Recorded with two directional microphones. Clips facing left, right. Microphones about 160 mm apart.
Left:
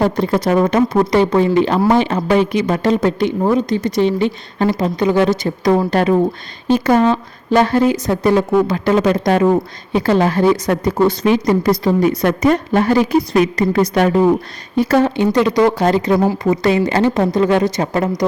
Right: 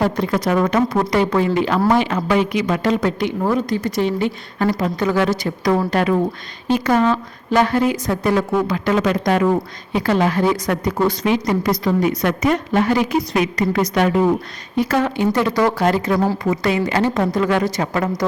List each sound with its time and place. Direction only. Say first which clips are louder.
0.0 s a woman's voice: left 3 dB; 30° left (ahead or behind)
16.6 s a woman's voice: left 4 dB; 30° left (ahead or behind)
18.2 s music: left 4 dB; 20° left (ahead or behind)